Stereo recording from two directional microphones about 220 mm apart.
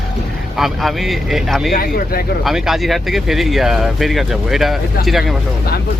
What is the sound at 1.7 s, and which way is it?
Speech, 45° left (ahead or behind).